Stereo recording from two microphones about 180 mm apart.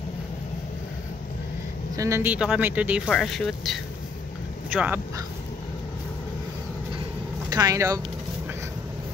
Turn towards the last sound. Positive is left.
turn(degrees=-20)  # may be behind; listen again after turning